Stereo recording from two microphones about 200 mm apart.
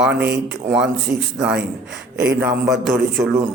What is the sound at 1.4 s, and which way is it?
Speech, 5° right (ahead or behind).